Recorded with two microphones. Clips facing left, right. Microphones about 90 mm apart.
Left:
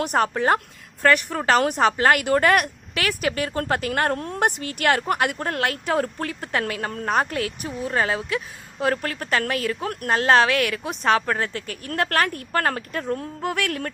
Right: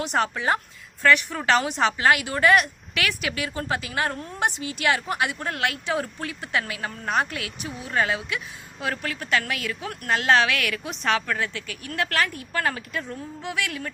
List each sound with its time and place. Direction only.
0.0 s a woman's voice: 45° left (ahead or behind)
10.1 s speech: 35° left (ahead or behind); by 13.9 s 50° left (ahead or behind)